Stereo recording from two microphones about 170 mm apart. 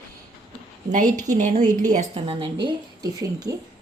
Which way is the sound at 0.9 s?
50° right (ahead or behind).